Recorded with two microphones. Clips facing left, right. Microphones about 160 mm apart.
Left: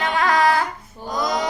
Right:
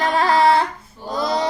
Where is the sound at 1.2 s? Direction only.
30° right (ahead or behind).